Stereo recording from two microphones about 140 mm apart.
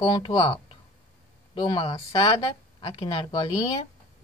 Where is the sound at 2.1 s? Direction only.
40° left (ahead or behind).